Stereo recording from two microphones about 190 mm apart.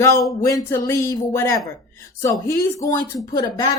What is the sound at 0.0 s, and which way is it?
A woman's voice, 15° left (ahead or behind).